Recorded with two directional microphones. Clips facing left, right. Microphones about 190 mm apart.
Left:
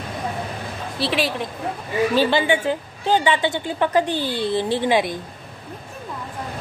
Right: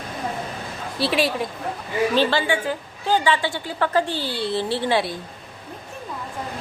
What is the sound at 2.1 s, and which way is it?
A woman's voice, 20° left (ahead or behind).